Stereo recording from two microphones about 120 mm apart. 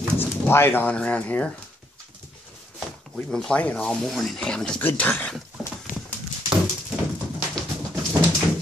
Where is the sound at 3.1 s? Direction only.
10° left (ahead or behind).